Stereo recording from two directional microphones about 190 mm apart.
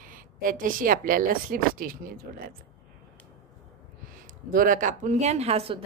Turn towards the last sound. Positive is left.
turn(degrees=-30)  # may be behind; listen again after turning